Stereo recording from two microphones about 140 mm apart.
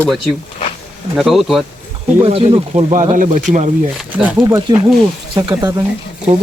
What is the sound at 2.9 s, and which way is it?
Speech, 60° right (ahead or behind).